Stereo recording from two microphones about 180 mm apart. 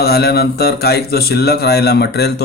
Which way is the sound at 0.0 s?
60° left (ahead or behind).